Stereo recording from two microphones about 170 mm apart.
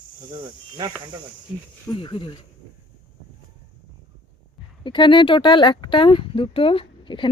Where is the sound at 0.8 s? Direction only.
20° right (ahead or behind).